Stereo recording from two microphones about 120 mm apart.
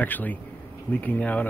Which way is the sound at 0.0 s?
15° left (ahead or behind).